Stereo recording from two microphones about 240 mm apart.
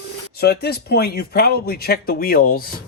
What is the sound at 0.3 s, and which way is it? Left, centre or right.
Speech, left.